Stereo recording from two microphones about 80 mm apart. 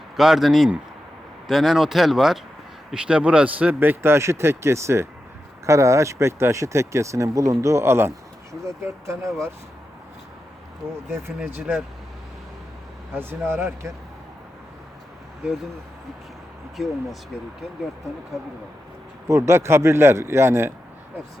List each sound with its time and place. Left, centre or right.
0.2 s a man's voice: centre; by 9.3 s right
11.1 s speech: right
11.5 s a man's voice: right
13.1 s a man's voice: right
16.7 s speech: centre
19.3 s speech: right